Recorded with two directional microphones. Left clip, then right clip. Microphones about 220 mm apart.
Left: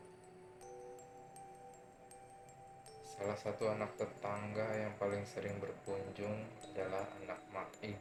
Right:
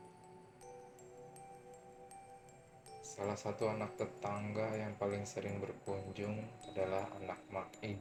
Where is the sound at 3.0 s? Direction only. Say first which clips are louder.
Even; 25° right (ahead or behind).